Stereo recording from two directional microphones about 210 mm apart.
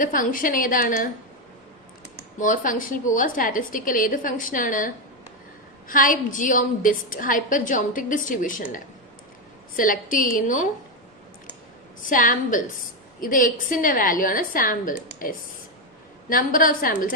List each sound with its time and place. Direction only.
0.0 s a woman's voice: 40° left (ahead or behind)
2.4 s a woman's voice: 40° left (ahead or behind)
5.9 s a woman's voice: 40° left (ahead or behind)
9.7 s a woman's voice: 40° left (ahead or behind)
12.0 s a woman's voice: 40° left (ahead or behind)